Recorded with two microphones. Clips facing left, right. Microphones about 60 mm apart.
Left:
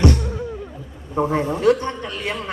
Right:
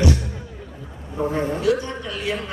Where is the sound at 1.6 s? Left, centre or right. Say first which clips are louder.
Left 4 dB; left.